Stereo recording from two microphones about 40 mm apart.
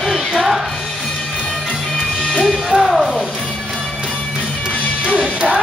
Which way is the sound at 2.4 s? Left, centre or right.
Centre.